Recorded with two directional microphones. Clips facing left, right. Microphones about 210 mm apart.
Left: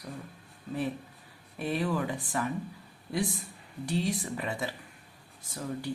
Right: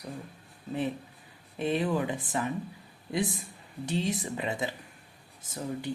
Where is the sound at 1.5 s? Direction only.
20° right (ahead or behind).